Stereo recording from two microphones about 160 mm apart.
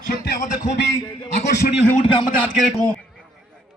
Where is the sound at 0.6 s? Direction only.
90° left.